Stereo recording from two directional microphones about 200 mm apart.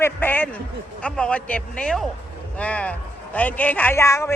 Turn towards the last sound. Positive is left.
turn(degrees=15)  # may be behind; listen again after turning